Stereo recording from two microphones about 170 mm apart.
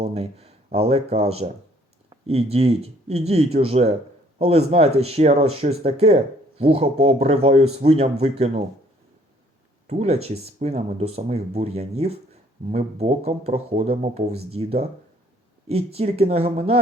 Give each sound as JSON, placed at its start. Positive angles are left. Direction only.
{"t": 0.0, "sound": "speech", "side_deg": -35}
{"t": 9.8, "sound": "speech", "side_deg": -40}